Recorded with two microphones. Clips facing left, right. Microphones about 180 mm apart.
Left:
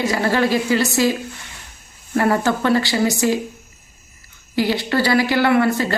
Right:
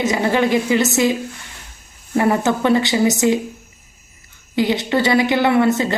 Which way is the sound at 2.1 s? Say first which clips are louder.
Right 1 dB; 20° right (ahead or behind).